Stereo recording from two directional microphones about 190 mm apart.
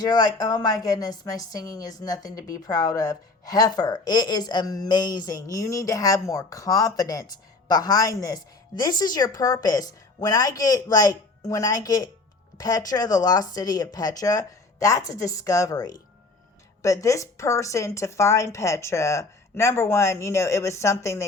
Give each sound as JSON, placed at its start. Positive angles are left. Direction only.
{"t": 0.0, "sound": "a woman's voice", "side_deg": 20}